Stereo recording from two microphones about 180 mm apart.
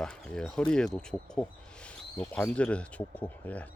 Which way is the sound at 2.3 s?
5° left (ahead or behind).